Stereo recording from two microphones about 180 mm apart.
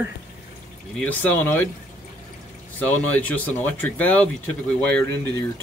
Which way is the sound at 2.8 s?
5° left (ahead or behind).